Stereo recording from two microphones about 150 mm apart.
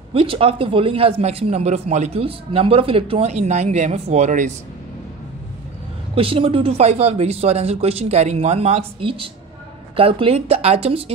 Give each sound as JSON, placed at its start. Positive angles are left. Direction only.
{"t": 0.1, "sound": "a man's voice", "side_deg": -35}
{"t": 6.1, "sound": "a man's voice", "side_deg": -35}